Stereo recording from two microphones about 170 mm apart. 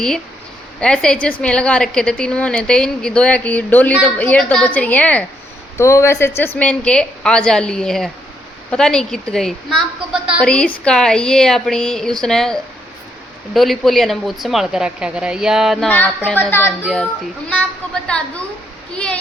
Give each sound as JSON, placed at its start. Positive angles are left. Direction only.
{"t": 0.8, "sound": "a woman's voice", "side_deg": 5}
{"t": 15.9, "sound": "a woman's voice", "side_deg": 10}
{"t": 16.8, "sound": "speech", "side_deg": 0}
{"t": 18.9, "sound": "a sound", "side_deg": 5}